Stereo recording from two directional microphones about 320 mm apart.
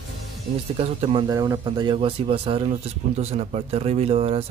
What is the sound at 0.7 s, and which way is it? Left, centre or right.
Speech, centre.